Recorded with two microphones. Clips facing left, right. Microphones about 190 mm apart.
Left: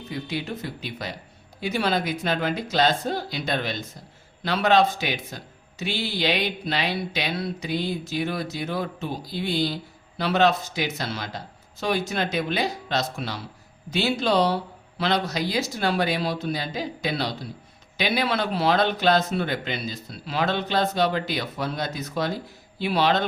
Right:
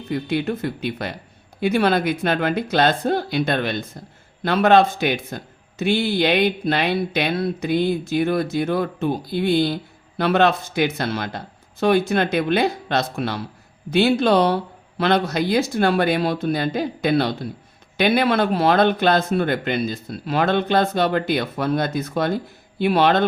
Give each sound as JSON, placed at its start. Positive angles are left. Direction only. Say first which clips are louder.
{"t": 0.1, "sound": "speech", "louder": "right 8 dB", "side_deg": -55}